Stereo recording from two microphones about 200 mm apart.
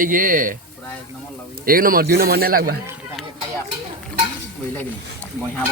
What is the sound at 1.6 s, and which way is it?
Speech, 45° right (ahead or behind).